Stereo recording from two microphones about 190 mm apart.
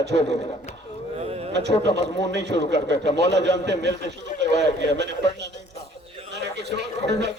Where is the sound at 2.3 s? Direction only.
65° right (ahead or behind).